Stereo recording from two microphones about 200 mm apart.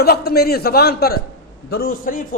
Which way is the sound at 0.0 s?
50° left (ahead or behind).